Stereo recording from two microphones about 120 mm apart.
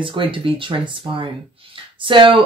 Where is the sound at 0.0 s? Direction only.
45° right (ahead or behind).